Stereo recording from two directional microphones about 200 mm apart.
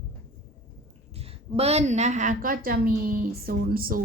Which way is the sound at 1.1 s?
30° right (ahead or behind).